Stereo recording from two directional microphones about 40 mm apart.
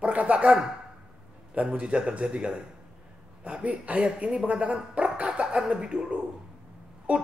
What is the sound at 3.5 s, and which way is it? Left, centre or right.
Speech, right.